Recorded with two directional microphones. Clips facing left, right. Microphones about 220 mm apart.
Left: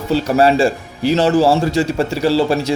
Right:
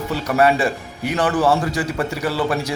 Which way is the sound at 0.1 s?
30° left (ahead or behind).